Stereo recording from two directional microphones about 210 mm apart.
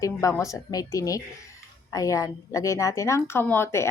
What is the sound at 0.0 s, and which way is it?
A woman's voice, 15° left (ahead or behind).